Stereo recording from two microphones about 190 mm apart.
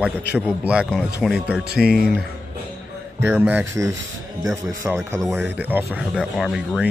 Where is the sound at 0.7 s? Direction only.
Centre (ahead or behind).